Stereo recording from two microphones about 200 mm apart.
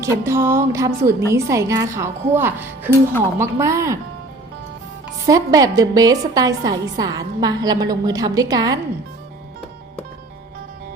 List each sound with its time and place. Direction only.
0.0 s a woman's voice: 15° right (ahead or behind)
5.2 s a woman's voice: 20° right (ahead or behind)